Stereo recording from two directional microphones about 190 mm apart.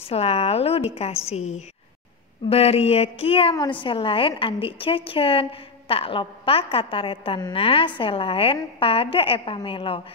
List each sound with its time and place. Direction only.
0.0 s a woman's voice: 30° left (ahead or behind)